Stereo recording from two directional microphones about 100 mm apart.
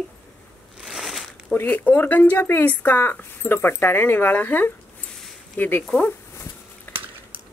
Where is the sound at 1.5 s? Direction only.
15° left (ahead or behind).